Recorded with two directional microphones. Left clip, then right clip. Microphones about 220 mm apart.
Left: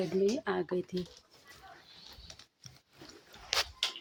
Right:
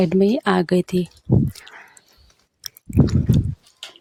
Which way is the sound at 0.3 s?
50° right (ahead or behind).